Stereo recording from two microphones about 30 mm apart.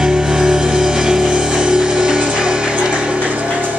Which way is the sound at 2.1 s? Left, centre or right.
Right.